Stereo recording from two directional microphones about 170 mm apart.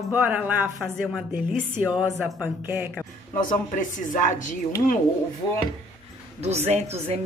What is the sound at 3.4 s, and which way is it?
Speech, 50° left (ahead or behind).